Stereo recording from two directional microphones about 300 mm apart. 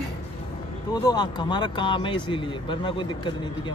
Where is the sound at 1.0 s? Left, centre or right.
Centre.